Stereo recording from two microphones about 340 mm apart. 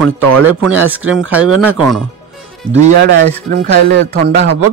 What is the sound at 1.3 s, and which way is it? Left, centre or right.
Speech, centre.